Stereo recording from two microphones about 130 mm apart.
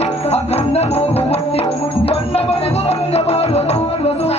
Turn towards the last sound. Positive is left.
turn(degrees=50)  # may be behind; listen again after turning